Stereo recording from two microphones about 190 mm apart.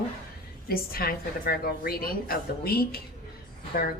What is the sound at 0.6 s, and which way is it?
A woman's voice, 50° left (ahead or behind).